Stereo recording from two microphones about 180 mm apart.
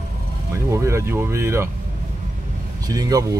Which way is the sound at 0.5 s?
15° right (ahead or behind).